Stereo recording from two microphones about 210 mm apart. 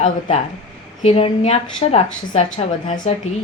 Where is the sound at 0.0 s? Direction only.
30° left (ahead or behind).